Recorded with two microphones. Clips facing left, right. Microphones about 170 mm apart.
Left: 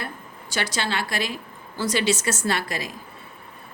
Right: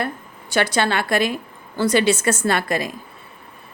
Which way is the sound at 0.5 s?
55° right (ahead or behind).